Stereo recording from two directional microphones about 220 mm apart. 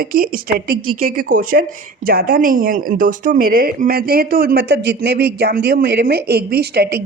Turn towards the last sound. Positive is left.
turn(degrees=-45)  # may be behind; listen again after turning